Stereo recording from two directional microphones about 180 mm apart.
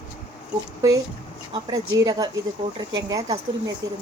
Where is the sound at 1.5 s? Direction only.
20° right (ahead or behind).